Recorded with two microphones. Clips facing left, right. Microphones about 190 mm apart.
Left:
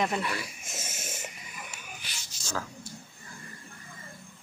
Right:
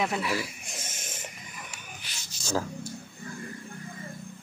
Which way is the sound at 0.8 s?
10° left (ahead or behind).